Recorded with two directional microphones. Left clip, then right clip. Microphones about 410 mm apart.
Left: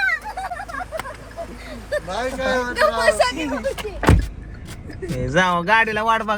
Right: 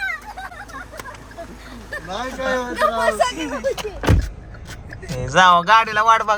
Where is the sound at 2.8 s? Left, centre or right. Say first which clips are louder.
Left 1 dB; centre.